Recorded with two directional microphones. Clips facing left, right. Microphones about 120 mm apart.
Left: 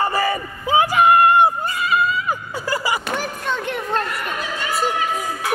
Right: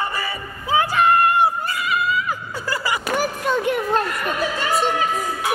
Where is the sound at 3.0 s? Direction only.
5° right (ahead or behind).